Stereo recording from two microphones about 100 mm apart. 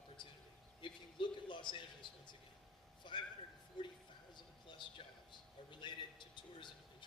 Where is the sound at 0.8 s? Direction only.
50° left (ahead or behind).